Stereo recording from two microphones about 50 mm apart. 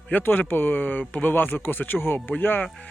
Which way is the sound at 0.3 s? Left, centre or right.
Left.